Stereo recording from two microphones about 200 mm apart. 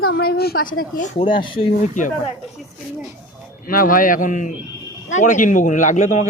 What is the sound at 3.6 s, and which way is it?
A man's voice, 45° left (ahead or behind).